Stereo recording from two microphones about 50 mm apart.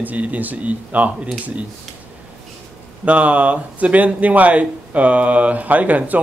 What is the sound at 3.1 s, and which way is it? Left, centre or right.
Speech, right.